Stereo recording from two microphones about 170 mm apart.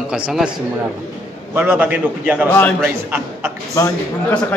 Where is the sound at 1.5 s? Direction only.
10° right (ahead or behind).